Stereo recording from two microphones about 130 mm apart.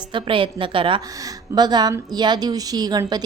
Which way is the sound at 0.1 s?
40° right (ahead or behind).